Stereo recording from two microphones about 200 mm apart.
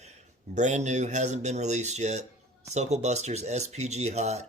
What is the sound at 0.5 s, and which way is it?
Speech, 35° right (ahead or behind).